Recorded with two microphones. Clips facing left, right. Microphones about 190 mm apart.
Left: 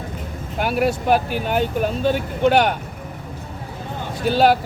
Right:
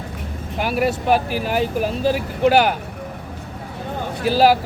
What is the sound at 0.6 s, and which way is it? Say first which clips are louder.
Speech: even; centre (ahead or behind).